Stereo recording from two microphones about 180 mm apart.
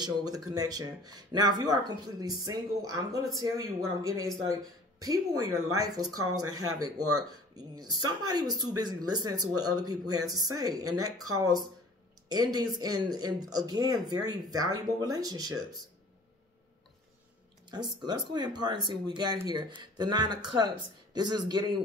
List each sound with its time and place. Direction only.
0.0 s speech: 20° right (ahead or behind)
17.6 s speech: 25° right (ahead or behind)